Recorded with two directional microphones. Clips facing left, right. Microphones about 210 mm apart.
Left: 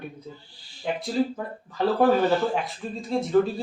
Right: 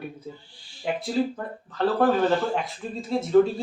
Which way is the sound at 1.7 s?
10° left (ahead or behind).